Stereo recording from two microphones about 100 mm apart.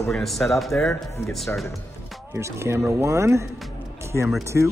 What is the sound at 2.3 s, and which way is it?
Speech, 30° right (ahead or behind).